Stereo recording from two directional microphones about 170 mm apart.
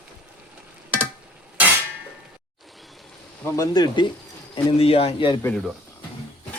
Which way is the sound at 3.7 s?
25° left (ahead or behind).